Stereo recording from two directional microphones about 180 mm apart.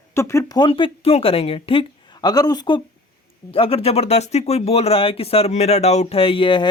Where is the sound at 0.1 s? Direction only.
15° left (ahead or behind).